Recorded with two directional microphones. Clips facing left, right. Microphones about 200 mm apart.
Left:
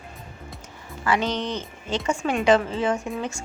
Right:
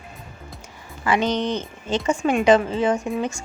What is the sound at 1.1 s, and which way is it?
A woman's voice, 20° right (ahead or behind).